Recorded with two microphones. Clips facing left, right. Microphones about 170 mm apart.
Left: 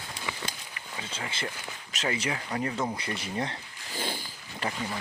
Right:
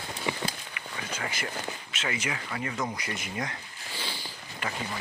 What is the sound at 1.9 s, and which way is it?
Speech, 35° left (ahead or behind).